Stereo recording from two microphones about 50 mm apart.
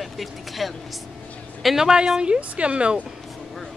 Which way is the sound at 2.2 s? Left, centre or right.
Right.